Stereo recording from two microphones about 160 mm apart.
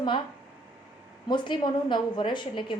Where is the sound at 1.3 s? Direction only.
30° left (ahead or behind).